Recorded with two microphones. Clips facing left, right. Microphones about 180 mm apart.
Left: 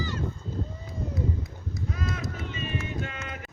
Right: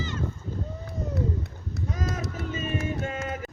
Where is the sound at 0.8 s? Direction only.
70° right (ahead or behind).